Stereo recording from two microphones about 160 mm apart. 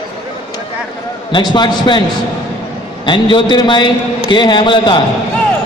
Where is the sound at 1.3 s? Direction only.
30° left (ahead or behind).